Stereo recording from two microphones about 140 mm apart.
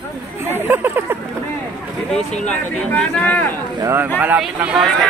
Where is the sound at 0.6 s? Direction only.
15° right (ahead or behind).